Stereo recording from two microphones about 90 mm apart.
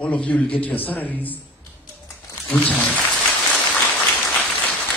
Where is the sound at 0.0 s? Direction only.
15° left (ahead or behind).